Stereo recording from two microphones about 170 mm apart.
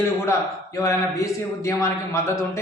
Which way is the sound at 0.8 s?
20° left (ahead or behind).